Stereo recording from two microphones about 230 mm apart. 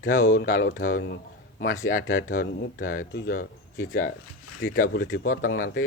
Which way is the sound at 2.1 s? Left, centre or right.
Left.